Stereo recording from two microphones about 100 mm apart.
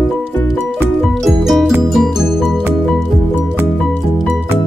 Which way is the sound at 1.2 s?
Centre (ahead or behind).